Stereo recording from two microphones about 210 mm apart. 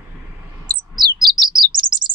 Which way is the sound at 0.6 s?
20° right (ahead or behind).